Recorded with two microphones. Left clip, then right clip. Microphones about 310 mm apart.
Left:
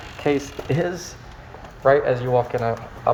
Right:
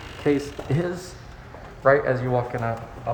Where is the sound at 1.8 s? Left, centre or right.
Centre.